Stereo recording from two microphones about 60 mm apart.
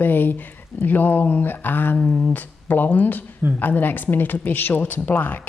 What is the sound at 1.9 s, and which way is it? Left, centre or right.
Speech, left.